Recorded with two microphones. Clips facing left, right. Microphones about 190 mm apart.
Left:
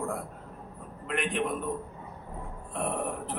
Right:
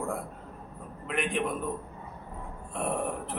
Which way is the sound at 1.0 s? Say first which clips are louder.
Even; centre (ahead or behind).